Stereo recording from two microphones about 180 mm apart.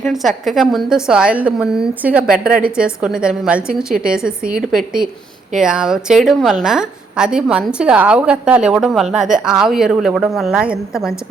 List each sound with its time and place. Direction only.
0.0 s a woman's voice: centre (ahead or behind)
2.5 s a woman's voice: 55° right (ahead or behind)
2.7 s a woman's voice: 5° right (ahead or behind)